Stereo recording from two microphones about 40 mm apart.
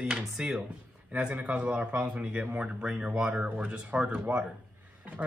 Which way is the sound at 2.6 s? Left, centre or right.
Right.